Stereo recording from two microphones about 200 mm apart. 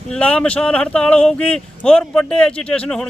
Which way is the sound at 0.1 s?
5° left (ahead or behind).